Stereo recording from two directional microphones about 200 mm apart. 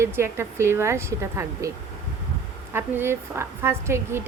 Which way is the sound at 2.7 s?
10° right (ahead or behind).